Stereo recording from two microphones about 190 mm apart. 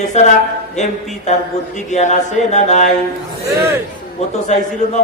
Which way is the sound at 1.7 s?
40° left (ahead or behind).